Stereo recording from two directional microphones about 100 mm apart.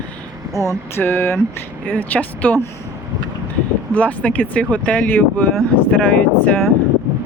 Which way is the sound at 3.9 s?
15° left (ahead or behind).